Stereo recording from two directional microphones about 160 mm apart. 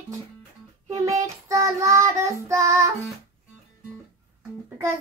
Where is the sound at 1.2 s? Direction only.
20° right (ahead or behind).